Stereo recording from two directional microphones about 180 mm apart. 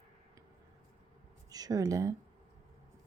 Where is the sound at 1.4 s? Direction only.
20° right (ahead or behind).